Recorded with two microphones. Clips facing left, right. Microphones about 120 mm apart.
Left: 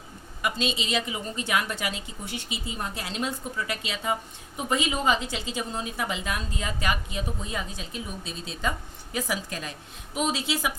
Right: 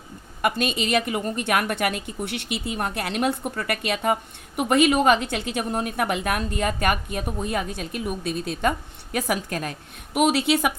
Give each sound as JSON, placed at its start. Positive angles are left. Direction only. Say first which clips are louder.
{"t": 0.4, "sound": "a woman's voice", "louder": "right 5 dB", "side_deg": -55}
{"t": 10.2, "sound": "a woman's voice", "louder": "right 8 dB", "side_deg": -65}